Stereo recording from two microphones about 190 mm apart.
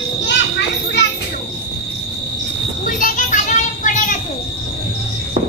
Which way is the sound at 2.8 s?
45° left (ahead or behind).